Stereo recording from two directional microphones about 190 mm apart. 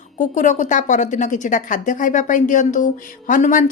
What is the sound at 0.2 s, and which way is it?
Speech, 40° left (ahead or behind).